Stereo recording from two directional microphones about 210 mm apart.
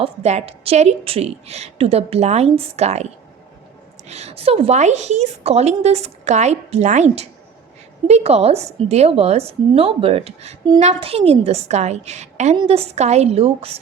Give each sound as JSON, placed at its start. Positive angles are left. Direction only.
{"t": 0.0, "sound": "a woman's voice", "side_deg": -30}